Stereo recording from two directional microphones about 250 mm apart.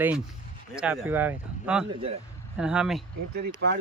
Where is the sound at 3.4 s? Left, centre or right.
Right.